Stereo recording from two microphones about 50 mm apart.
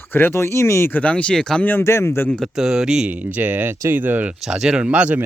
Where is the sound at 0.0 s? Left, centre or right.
Left.